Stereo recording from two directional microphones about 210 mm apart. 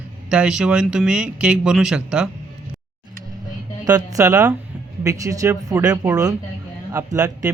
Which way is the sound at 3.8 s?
15° right (ahead or behind).